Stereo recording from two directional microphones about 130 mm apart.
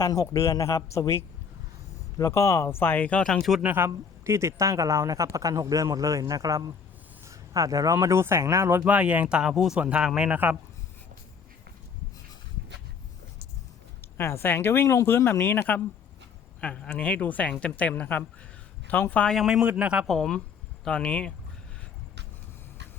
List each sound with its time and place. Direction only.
0.0 s speech: 25° left (ahead or behind); by 3.6 s centre (ahead or behind)
3.6 s speech: 15° right (ahead or behind)
8.8 s speech: 10° right (ahead or behind)
14.2 s a man's voice: 20° left (ahead or behind)